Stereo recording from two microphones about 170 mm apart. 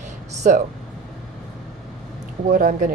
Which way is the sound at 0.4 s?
50° right (ahead or behind).